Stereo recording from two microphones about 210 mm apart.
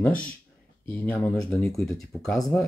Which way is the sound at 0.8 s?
5° left (ahead or behind).